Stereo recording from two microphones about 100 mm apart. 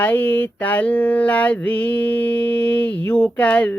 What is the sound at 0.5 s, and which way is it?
Mantra, 15° left (ahead or behind).